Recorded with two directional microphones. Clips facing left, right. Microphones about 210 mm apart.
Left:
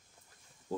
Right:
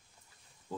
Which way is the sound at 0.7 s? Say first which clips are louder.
Left 4 dB; 45° left (ahead or behind).